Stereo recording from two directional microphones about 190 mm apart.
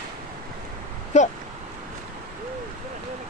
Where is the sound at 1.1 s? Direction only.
40° left (ahead or behind).